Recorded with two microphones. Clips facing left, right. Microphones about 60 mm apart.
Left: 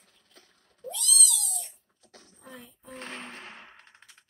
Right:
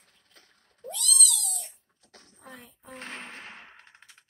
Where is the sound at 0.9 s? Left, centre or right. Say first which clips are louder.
Right 1 dB; right.